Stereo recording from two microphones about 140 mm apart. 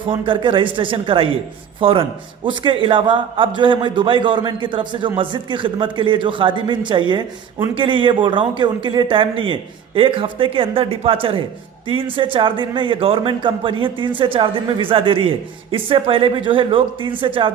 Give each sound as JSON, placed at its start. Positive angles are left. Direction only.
{"t": 0.1, "sound": "a man's voice", "side_deg": -35}